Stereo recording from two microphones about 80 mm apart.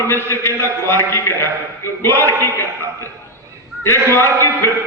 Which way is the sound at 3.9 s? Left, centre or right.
Left.